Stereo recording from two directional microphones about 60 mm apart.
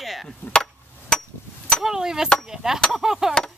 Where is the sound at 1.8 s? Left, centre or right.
Centre.